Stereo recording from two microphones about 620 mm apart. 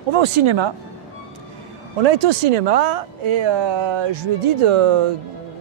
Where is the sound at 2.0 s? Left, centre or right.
Right.